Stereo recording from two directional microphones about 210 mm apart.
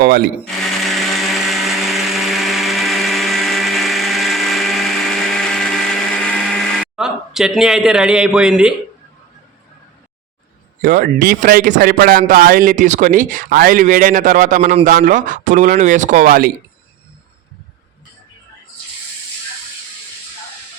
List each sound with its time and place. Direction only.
0.0 s speech: 45° right (ahead or behind)
0.4 s blender: centre (ahead or behind)
6.5 s a sound: 5° left (ahead or behind)
10.8 s speech: 40° right (ahead or behind)